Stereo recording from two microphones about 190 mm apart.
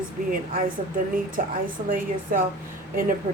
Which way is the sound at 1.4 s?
45° right (ahead or behind).